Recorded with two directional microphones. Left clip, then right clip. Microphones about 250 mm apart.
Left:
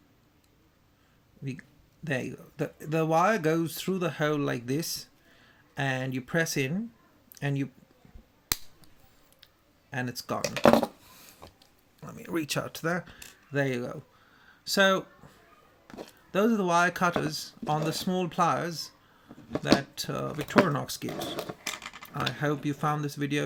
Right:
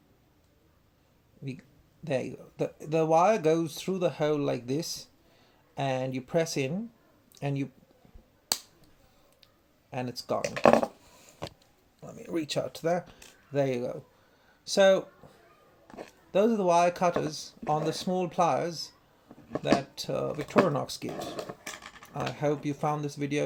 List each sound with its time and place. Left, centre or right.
2.0 s speech: left
9.9 s speech: left
10.4 s speech: centre
11.9 s speech: left
16.3 s speech: left
19.5 s speech: centre
19.7 s speech: left
20.7 s a sound: left
22.1 s speech: left